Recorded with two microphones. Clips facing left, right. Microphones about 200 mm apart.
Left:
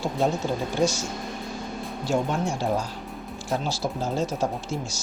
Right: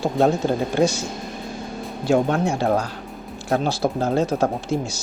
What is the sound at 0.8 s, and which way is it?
Speech, 60° right (ahead or behind).